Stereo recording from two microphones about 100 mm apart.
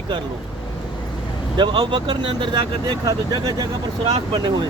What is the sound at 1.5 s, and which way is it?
Speech, 50° right (ahead or behind).